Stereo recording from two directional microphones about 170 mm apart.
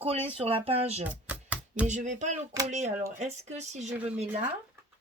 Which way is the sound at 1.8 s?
45° right (ahead or behind).